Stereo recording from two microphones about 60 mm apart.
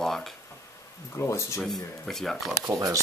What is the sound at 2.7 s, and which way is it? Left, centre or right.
Speech, right.